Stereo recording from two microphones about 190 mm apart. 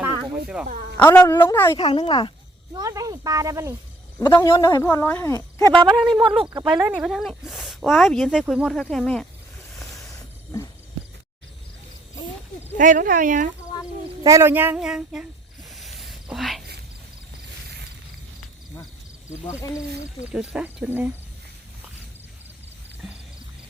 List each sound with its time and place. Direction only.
0.5 s speech: 5° right (ahead or behind)
0.9 s speech: 10° left (ahead or behind)
1.8 s speech: 25° left (ahead or behind)
2.7 s speech: 20° right (ahead or behind)
4.2 s speech: 20° left (ahead or behind)
6.2 s speech: 25° right (ahead or behind); by 9.2 s 5° left (ahead or behind)
10.1 s a sound: 15° left (ahead or behind)
12.7 s speech: 45° right (ahead or behind)
14.3 s speech: 15° right (ahead or behind)
15.7 s a sound: centre (ahead or behind)
19.5 s speech: 15° left (ahead or behind)
20.1 s speech: 5° right (ahead or behind)